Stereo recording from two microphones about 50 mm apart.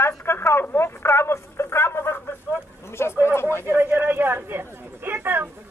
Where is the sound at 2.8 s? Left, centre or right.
Left.